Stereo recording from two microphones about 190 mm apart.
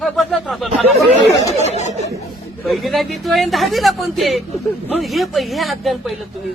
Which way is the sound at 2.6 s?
Centre (ahead or behind).